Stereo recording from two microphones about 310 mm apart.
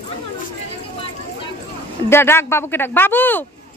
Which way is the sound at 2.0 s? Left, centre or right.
Centre.